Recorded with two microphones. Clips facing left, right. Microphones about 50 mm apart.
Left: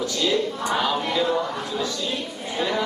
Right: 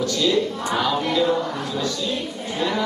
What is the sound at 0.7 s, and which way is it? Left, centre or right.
Music, centre.